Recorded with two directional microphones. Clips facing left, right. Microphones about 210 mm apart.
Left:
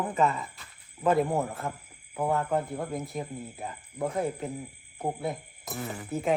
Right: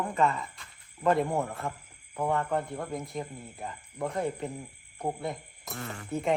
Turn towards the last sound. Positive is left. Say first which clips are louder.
# left 1 dB
turn(degrees=0)  # may be behind; listen again after turning